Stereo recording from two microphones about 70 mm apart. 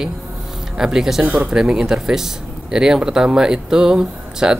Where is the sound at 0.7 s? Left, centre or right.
Centre.